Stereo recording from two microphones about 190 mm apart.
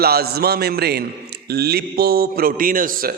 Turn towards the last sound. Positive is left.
turn(degrees=-45)  # may be behind; listen again after turning